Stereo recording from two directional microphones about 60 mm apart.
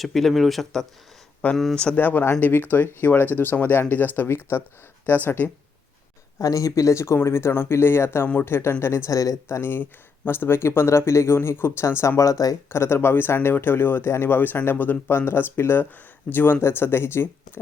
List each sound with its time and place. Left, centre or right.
0.0 s speech: centre
2.0 s speech: left
6.4 s speech: left
9.0 s speech: left
9.5 s speech: left
12.7 s speech: left